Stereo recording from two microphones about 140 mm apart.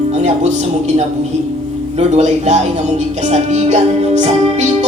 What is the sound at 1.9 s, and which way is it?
Speech, 50° right (ahead or behind).